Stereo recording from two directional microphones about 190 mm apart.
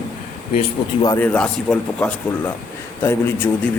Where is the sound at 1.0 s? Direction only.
10° left (ahead or behind).